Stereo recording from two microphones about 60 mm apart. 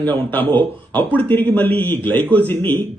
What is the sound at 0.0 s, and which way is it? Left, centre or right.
Speech, left.